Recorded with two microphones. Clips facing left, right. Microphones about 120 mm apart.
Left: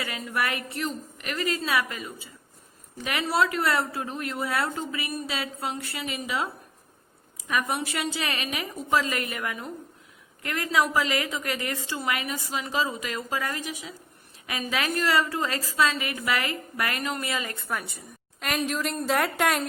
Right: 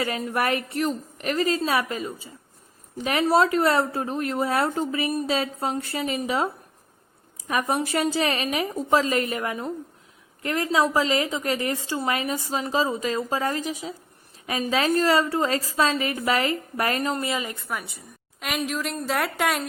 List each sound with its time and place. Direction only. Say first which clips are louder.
0.0 s a woman's voice: right 5 dB; 40° right (ahead or behind); by 17.5 s 20° right (ahead or behind)
17.5 s a woman's voice: even; 5° right (ahead or behind)